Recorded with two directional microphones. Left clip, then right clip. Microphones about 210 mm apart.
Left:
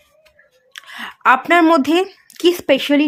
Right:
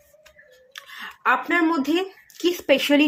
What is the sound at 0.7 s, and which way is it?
Speech, 30° left (ahead or behind).